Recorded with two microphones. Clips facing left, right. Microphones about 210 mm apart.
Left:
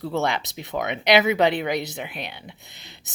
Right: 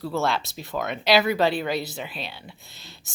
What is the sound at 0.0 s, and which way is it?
A woman's voice, 20° left (ahead or behind).